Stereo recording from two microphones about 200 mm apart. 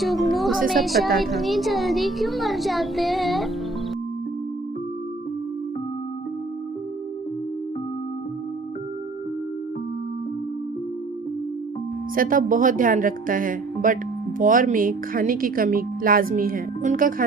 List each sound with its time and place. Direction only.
0.0 s a woman's voice: centre (ahead or behind)
12.1 s speech: 45° right (ahead or behind)